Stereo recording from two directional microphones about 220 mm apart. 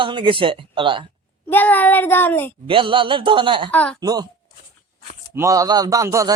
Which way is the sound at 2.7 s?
25° right (ahead or behind).